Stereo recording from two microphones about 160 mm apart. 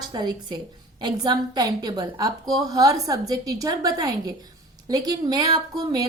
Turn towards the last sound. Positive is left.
turn(degrees=-25)  # may be behind; listen again after turning